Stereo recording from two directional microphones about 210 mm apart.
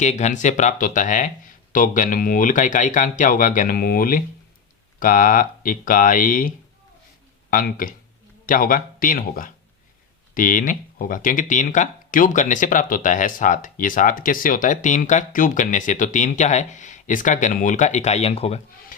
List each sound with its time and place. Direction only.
0.0 s speech: 35° left (ahead or behind)
7.5 s speech: 40° left (ahead or behind)